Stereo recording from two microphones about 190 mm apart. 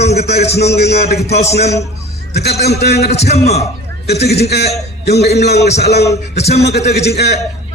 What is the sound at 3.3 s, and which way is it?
Speech, 35° left (ahead or behind).